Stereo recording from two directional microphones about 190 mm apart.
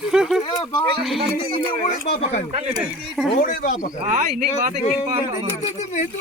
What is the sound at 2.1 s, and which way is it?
Speech, 35° left (ahead or behind).